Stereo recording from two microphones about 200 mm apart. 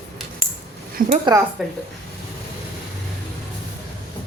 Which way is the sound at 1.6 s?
Centre (ahead or behind).